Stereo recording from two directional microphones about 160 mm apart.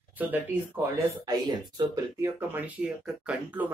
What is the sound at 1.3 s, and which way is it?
Speech, 25° right (ahead or behind).